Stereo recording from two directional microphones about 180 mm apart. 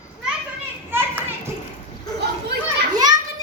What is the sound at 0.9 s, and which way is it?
Children playing, 10° right (ahead or behind).